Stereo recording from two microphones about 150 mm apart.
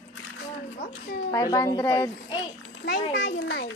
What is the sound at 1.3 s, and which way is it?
Speech, 25° left (ahead or behind).